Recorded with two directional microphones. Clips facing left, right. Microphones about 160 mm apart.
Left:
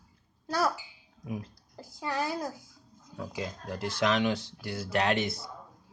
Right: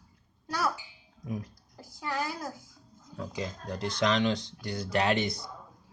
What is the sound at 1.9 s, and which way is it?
Child singing, 25° left (ahead or behind).